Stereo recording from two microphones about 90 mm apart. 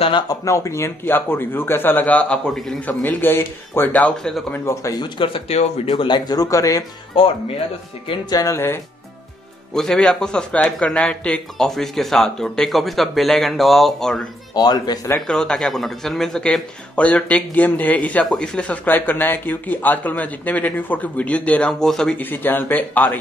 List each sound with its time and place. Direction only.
0.3 s a man's voice: 35° left (ahead or behind); by 4.3 s 15° left (ahead or behind)
4.9 s speech: 60° left (ahead or behind); by 6.8 s 40° left (ahead or behind)
7.2 s speech: 80° left
8.3 s speech: 40° left (ahead or behind)
8.5 s a man's voice: 25° left (ahead or behind)
9.8 s speech: 5° left (ahead or behind)
14.5 s speech: 50° left (ahead or behind)
15.2 s speech: 10° left (ahead or behind)
22.2 s a man's voice: 20° left (ahead or behind)